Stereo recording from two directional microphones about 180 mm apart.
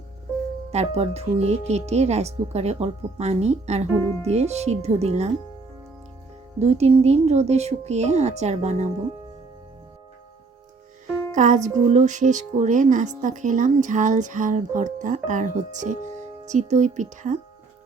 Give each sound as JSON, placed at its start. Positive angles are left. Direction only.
{"t": 0.7, "sound": "speech", "side_deg": -35}
{"t": 6.6, "sound": "speech", "side_deg": -35}
{"t": 11.3, "sound": "speech", "side_deg": -45}